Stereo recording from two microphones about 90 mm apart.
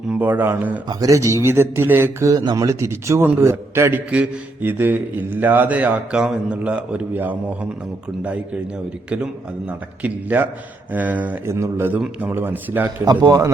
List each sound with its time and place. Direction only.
0.1 s speech: 20° right (ahead or behind)
0.9 s speech: 40° right (ahead or behind)
2.3 s a man's voice: 50° right (ahead or behind)
2.6 s a man's voice: 35° right (ahead or behind); by 11.3 s 15° right (ahead or behind)
11.4 s speech: 30° right (ahead or behind)
12.3 s speech: 20° right (ahead or behind)
13.2 s speech: 40° right (ahead or behind)